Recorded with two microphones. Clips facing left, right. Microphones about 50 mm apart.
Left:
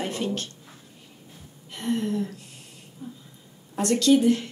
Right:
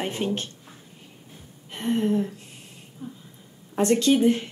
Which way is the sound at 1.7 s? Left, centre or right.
Right.